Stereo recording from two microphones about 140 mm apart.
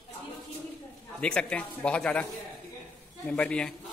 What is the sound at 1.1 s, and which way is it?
A man's voice, 5° left (ahead or behind).